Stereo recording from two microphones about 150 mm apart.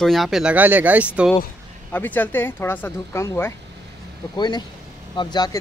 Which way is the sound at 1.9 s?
10° left (ahead or behind).